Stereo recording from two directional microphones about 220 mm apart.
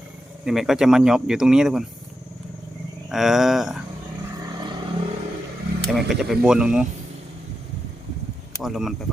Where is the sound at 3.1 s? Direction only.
Centre (ahead or behind).